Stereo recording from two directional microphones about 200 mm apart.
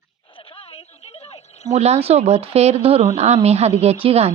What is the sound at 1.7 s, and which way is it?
Speech, 30° right (ahead or behind).